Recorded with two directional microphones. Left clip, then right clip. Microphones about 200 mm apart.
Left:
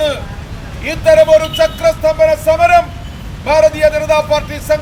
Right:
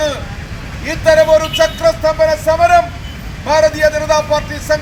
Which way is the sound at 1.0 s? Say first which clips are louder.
Left 2 dB; 5° left (ahead or behind).